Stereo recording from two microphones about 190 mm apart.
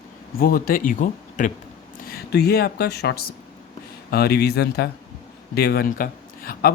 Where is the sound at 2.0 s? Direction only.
55° left (ahead or behind).